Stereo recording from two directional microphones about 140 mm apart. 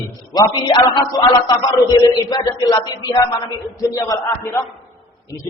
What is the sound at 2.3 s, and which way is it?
A man's voice, 30° left (ahead or behind).